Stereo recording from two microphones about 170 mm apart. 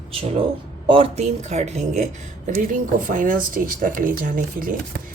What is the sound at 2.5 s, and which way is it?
Speech, 55° right (ahead or behind).